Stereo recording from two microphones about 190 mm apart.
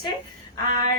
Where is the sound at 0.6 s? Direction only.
25° left (ahead or behind).